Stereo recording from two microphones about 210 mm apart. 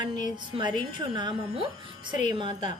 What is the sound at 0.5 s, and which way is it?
A woman's voice, 20° right (ahead or behind).